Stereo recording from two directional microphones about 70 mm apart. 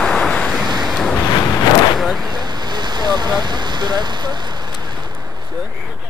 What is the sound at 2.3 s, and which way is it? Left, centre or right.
Vehicle, right.